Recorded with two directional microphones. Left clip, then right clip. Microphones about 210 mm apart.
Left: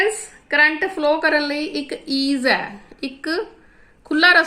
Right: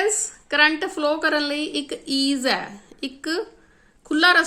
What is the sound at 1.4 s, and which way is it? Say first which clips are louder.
Speech: left 2 dB; 50° right (ahead or behind).